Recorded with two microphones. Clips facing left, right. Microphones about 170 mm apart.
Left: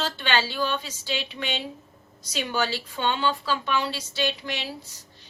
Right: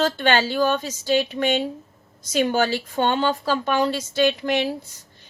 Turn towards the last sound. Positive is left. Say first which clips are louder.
# right 4 dB
turn(degrees=-50)  # may be behind; listen again after turning